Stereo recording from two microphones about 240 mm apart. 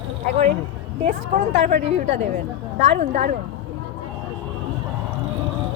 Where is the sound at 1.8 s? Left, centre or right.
Right.